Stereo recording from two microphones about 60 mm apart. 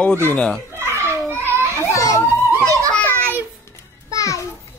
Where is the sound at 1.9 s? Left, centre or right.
Left.